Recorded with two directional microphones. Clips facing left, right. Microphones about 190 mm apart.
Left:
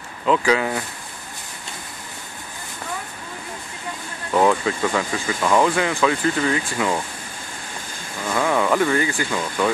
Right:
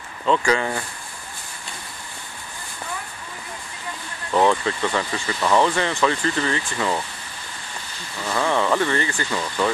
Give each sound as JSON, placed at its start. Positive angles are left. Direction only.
{"t": 0.2, "sound": "speech", "side_deg": 5}
{"t": 4.3, "sound": "speech", "side_deg": 5}
{"t": 8.3, "sound": "speech", "side_deg": 10}